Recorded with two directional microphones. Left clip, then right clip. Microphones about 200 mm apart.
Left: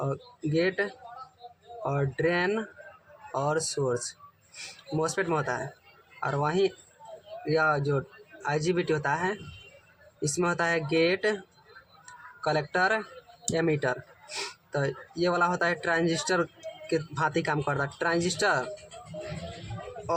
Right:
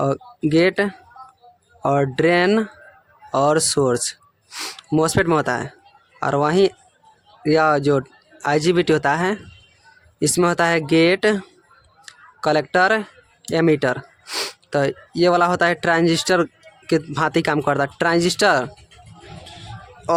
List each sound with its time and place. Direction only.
0.0 s speech: 55° right (ahead or behind)
12.4 s speech: 55° right (ahead or behind)